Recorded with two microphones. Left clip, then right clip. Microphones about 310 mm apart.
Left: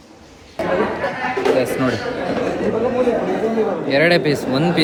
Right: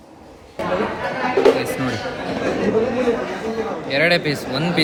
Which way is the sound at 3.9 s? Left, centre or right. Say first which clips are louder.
Left 2 dB; centre.